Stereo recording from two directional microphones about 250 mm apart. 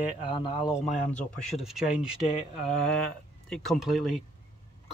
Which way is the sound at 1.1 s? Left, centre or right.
Centre.